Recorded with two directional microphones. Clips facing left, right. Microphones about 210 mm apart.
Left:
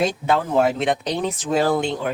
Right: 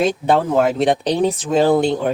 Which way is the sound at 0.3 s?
35° right (ahead or behind).